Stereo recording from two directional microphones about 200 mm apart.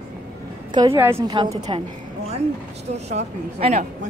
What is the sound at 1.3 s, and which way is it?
Speech, 25° right (ahead or behind).